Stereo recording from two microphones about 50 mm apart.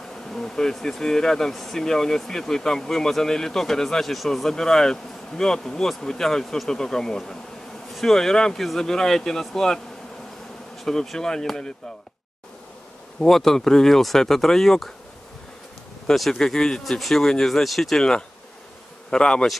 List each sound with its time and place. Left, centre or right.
0.3 s speech: centre
10.8 s speech: centre
13.2 s speech: centre
16.1 s speech: centre